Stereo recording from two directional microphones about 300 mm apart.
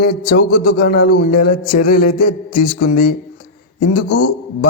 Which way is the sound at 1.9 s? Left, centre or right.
Left.